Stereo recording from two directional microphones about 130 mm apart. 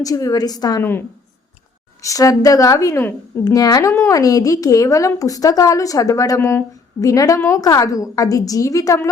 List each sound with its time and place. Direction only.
0.0 s a woman's voice: 25° left (ahead or behind)
0.8 s a woman's voice: 15° left (ahead or behind)
3.4 s a woman's voice: 30° left (ahead or behind)